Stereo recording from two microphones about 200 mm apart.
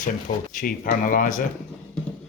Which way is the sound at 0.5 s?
45° left (ahead or behind).